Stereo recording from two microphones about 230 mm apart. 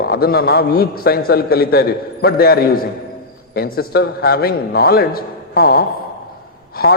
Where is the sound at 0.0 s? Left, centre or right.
Left.